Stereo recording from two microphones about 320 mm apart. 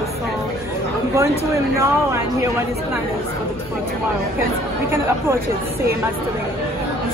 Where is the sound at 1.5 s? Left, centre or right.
Centre.